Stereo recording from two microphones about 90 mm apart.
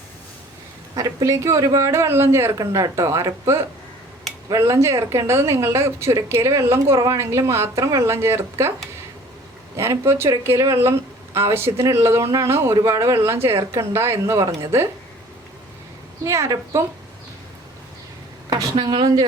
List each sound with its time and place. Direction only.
0.9 s speech: 40° right (ahead or behind)
2.5 s speech: 40° right (ahead or behind)
9.7 s speech: 30° right (ahead or behind)
16.2 s speech: 35° right (ahead or behind)
18.8 s speech: 60° right (ahead or behind)